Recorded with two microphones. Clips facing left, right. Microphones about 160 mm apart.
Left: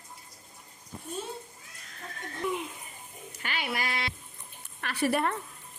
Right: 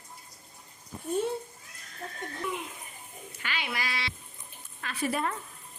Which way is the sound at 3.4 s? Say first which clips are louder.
Left 2 dB; 45° left (ahead or behind).